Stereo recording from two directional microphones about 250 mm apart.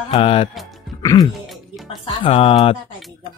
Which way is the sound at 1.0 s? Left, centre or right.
Centre.